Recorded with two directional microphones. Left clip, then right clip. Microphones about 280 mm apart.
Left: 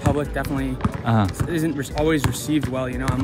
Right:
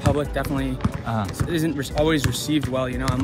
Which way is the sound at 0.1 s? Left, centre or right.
Centre.